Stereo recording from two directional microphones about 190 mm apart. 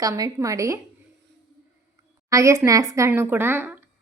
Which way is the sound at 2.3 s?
15° right (ahead or behind).